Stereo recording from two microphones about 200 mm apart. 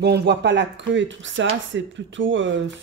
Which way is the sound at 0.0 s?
55° right (ahead or behind).